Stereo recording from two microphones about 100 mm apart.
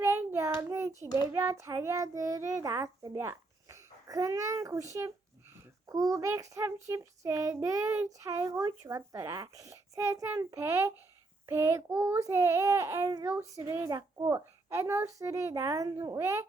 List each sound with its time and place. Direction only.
0.0 s child singing: 20° right (ahead or behind)
1.0 s child singing: 45° left (ahead or behind)
1.3 s a child's voice: 30° right (ahead or behind)